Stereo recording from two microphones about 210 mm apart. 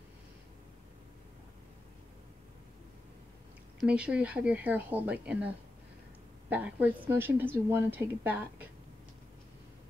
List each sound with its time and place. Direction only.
3.8 s speech: 5° right (ahead or behind)
6.5 s a woman's voice: 5° right (ahead or behind)